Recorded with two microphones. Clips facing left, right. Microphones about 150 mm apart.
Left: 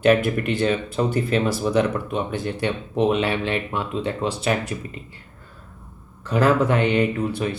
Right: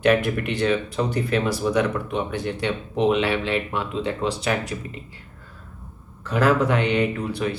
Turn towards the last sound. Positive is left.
turn(degrees=0)  # may be behind; listen again after turning